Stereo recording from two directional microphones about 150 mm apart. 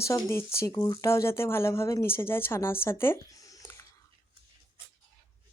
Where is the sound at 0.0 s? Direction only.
20° left (ahead or behind).